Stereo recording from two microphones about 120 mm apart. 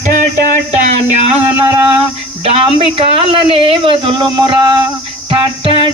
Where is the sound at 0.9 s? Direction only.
70° right (ahead or behind).